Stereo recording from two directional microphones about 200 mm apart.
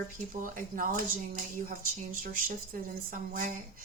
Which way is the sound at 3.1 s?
40° right (ahead or behind).